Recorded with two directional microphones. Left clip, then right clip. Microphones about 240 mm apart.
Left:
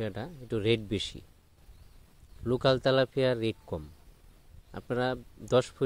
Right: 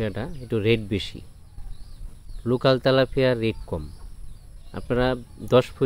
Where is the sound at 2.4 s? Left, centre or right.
Left.